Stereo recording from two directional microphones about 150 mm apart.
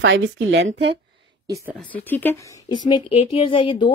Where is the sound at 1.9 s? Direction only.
15° left (ahead or behind).